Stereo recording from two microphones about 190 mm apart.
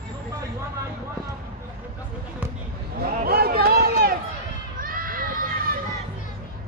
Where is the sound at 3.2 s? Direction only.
55° right (ahead or behind).